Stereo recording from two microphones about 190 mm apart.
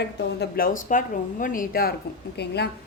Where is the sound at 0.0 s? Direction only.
55° left (ahead or behind).